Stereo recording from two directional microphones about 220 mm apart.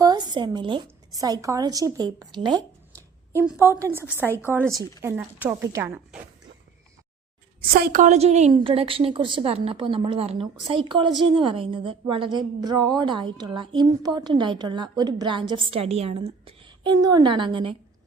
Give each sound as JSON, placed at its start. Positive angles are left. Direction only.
{"t": 0.0, "sound": "a woman's voice", "side_deg": -20}
{"t": 3.3, "sound": "a woman's voice", "side_deg": -10}
{"t": 7.6, "sound": "a woman's voice", "side_deg": -45}